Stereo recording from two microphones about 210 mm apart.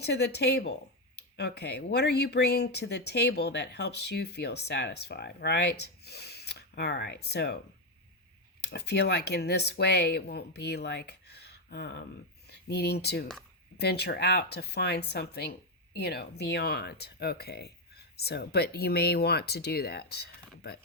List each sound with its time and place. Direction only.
0.0 s speech: 50° left (ahead or behind)
8.6 s speech: 50° left (ahead or behind)